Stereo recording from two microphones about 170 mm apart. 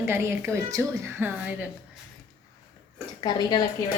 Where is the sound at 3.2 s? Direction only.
25° left (ahead or behind).